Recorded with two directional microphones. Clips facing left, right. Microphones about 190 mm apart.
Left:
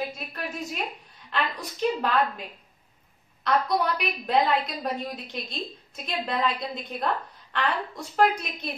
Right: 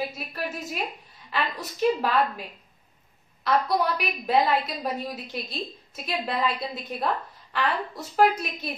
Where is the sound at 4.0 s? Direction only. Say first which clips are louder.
Right 1 dB; 5° right (ahead or behind).